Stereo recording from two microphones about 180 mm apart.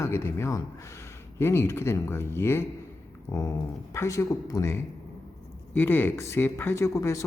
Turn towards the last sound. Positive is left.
turn(degrees=15)  # may be behind; listen again after turning